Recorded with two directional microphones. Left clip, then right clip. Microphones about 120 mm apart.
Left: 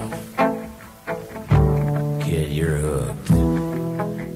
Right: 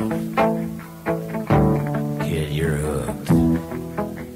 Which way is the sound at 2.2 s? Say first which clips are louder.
Left 1 dB; 40° right (ahead or behind).